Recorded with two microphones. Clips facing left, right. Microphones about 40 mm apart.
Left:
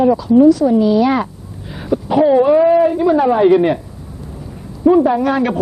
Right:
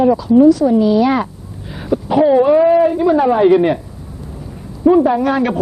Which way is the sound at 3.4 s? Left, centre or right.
Centre.